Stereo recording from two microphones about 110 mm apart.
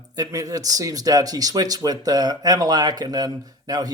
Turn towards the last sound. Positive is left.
turn(degrees=-35)  # may be behind; listen again after turning